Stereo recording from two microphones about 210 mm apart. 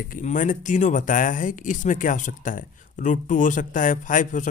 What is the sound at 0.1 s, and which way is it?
Speech, 35° left (ahead or behind).